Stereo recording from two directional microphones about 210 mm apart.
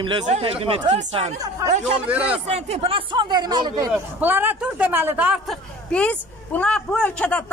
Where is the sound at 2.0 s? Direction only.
5° right (ahead or behind).